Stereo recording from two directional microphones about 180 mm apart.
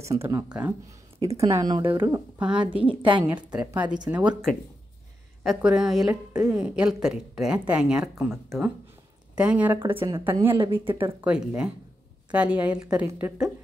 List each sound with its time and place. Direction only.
0.2 s speech: 15° right (ahead or behind)
2.1 s speech: 10° right (ahead or behind)
3.0 s speech: 25° right (ahead or behind)
3.5 s speech: 5° right (ahead or behind)
9.9 s speech: 25° right (ahead or behind)
10.2 s speech: 10° right (ahead or behind)
10.6 s speech: 30° right (ahead or behind)
11.0 s speech: 10° right (ahead or behind)